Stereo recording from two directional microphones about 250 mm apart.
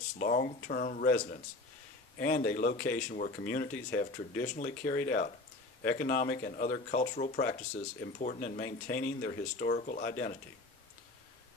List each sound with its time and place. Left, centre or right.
0.2 s speech: left